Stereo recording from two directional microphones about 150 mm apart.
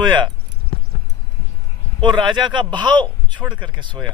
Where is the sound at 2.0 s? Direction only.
30° right (ahead or behind).